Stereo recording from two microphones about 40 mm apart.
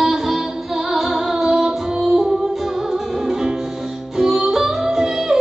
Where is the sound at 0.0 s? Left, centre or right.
Centre.